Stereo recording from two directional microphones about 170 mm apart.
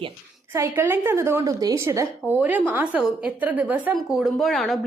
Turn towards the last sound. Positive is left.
turn(degrees=0)  # may be behind; listen again after turning